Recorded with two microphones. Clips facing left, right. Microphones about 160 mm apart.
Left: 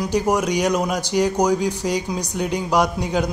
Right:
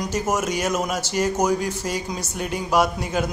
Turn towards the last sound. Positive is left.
turn(degrees=15)  # may be behind; listen again after turning